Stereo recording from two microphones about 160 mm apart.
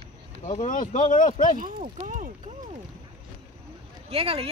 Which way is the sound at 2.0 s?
50° right (ahead or behind).